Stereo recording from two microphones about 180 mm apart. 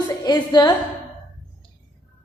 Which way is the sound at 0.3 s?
20° left (ahead or behind).